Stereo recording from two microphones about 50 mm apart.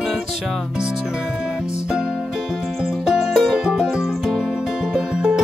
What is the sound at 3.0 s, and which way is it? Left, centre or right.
Music, centre.